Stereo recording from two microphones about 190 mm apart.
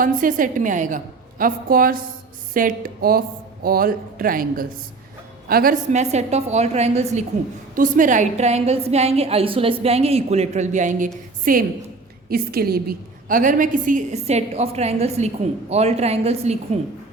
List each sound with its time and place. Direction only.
0.0 s a woman's voice: 45° right (ahead or behind)